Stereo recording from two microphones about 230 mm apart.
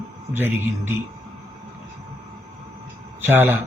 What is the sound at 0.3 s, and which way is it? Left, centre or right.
Speech, centre.